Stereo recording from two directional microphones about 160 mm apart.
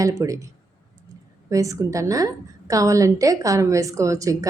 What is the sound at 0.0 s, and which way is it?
Speech, 20° right (ahead or behind).